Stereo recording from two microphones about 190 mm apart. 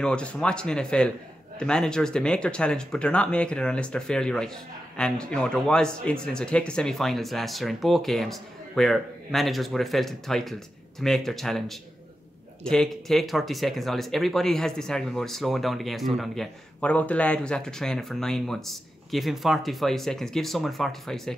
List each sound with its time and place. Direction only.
0.0 s speech: 5° left (ahead or behind)